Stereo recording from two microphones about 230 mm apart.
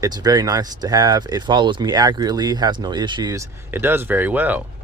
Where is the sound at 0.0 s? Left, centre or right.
Centre.